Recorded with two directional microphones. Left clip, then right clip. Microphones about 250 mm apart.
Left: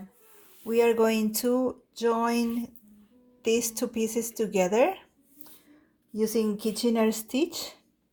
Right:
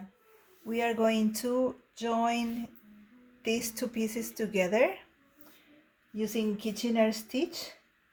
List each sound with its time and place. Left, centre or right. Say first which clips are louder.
0.7 s a woman's voice: left 6 dB; left
6.1 s speech: left 6 dB; left